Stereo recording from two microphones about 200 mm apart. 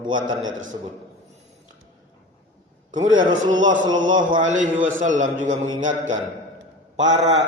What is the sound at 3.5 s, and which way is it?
Speech, 70° right (ahead or behind).